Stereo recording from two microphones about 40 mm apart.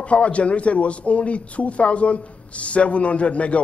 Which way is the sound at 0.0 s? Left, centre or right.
Left.